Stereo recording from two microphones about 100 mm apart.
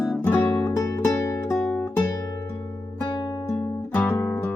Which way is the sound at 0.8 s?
35° left (ahead or behind).